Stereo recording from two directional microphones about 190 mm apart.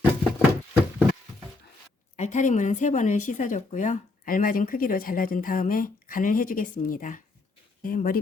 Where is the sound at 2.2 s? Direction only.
40° left (ahead or behind).